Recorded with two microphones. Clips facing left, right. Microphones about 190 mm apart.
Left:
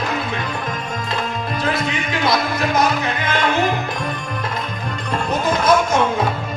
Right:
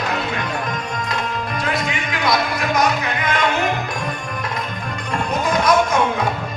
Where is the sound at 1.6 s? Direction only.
25° left (ahead or behind).